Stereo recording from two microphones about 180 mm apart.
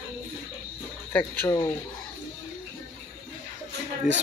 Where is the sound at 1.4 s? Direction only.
15° left (ahead or behind).